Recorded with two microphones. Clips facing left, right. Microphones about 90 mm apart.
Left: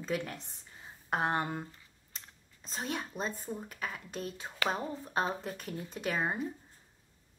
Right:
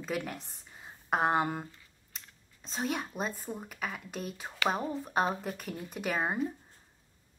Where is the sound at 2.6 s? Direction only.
Centre (ahead or behind).